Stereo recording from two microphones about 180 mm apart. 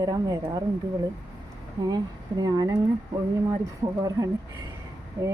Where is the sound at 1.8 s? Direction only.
20° right (ahead or behind).